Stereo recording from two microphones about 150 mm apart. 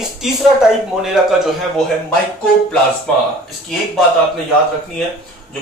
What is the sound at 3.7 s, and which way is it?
Speech, centre (ahead or behind).